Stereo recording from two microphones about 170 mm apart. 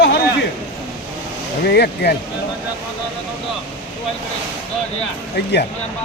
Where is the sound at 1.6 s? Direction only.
70° left (ahead or behind).